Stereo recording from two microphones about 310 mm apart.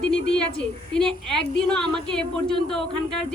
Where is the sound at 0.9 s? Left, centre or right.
Centre.